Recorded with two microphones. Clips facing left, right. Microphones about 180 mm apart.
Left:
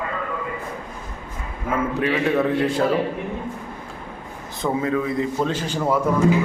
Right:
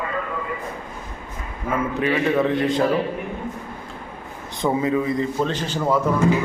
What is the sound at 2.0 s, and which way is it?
Speech, 5° left (ahead or behind).